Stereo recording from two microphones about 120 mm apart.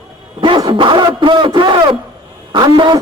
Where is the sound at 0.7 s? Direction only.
45° right (ahead or behind).